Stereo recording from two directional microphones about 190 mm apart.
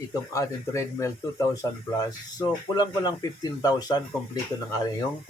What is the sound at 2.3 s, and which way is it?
Speech, 20° left (ahead or behind).